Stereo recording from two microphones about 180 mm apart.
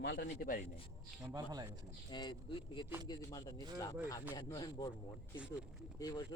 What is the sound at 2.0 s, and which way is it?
Speech, 25° left (ahead or behind).